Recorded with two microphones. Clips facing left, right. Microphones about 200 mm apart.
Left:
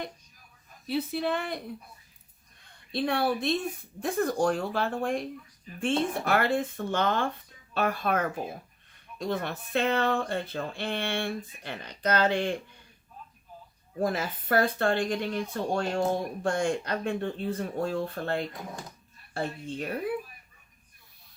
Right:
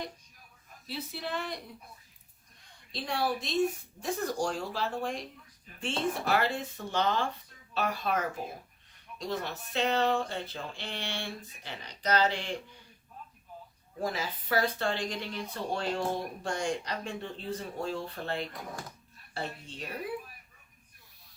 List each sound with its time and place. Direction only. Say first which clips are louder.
0.9 s speech: left 9 dB; 60° left (ahead or behind)
2.9 s speech: left 5 dB; 60° left (ahead or behind)
14.0 s speech: left 5 dB; 55° left (ahead or behind)